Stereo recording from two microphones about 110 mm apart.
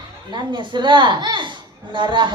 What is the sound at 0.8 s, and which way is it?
A woman's voice, 45° right (ahead or behind).